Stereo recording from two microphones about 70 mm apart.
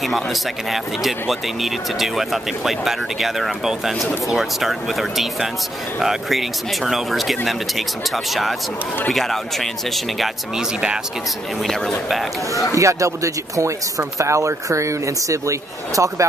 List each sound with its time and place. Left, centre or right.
0.0 s speech: centre
11.6 s speech: centre
12.7 s speech: right